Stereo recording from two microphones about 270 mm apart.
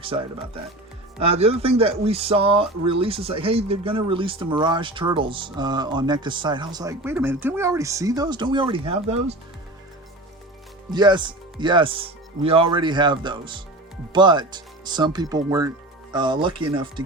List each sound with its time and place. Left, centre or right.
0.0 s speech: centre
10.9 s speech: centre